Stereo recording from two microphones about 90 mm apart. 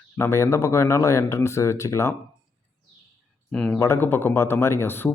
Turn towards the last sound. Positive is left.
turn(degrees=25)  # may be behind; listen again after turning